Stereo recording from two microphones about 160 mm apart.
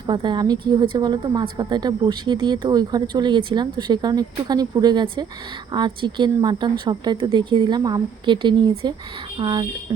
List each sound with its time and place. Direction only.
0.1 s a woman's voice: 30° right (ahead or behind)